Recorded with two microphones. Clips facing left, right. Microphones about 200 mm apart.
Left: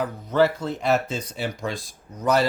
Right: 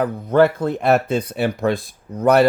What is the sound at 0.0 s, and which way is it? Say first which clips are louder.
Speech: right 5 dB; 55° right (ahead or behind).